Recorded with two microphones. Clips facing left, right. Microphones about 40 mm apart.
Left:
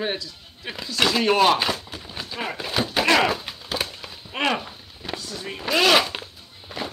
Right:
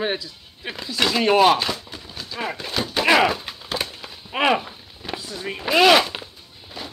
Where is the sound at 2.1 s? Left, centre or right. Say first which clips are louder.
Left 1 dB; centre.